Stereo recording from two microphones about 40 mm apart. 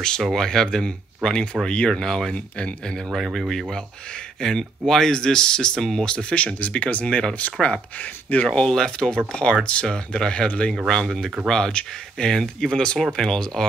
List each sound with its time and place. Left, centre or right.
0.2 s speech: centre
3.3 s speech: centre; by 8.5 s left
8.5 s speech: centre